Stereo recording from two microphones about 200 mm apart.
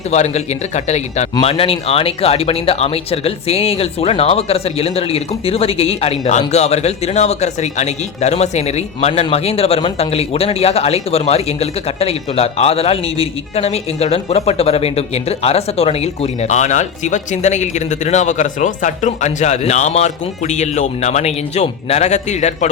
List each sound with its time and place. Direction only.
0.1 s speech: 35° left (ahead or behind)